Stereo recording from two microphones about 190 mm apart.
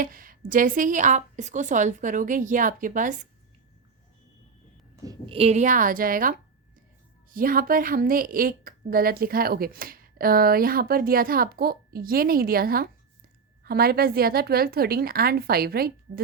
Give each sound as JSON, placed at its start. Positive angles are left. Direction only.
{"t": 0.0, "sound": "a woman's voice", "side_deg": -45}
{"t": 4.9, "sound": "a woman's voice", "side_deg": -20}